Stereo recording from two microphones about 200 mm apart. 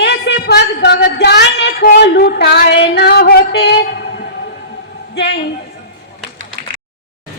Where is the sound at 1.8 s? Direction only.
50° left (ahead or behind).